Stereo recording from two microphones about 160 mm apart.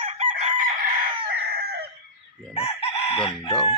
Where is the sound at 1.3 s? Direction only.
75° right (ahead or behind).